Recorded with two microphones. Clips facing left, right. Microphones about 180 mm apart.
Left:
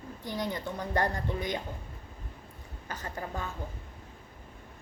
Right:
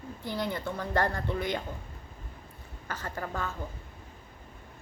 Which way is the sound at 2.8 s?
15° left (ahead or behind).